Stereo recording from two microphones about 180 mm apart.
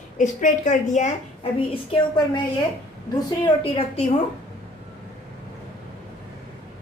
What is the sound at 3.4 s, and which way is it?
Speech, 30° left (ahead or behind).